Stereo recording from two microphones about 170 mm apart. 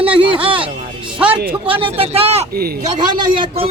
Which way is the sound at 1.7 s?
35° right (ahead or behind).